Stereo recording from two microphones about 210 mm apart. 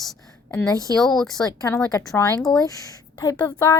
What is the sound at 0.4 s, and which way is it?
A woman's voice, 10° left (ahead or behind).